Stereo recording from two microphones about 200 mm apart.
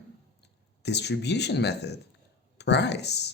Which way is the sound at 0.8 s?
55° left (ahead or behind).